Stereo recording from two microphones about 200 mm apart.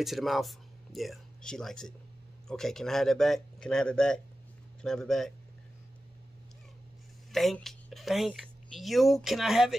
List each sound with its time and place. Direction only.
0.0 s a man's voice: centre (ahead or behind)
7.3 s a woman's voice: centre (ahead or behind)